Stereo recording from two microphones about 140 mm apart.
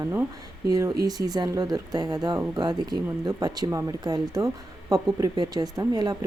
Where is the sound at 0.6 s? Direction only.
25° right (ahead or behind).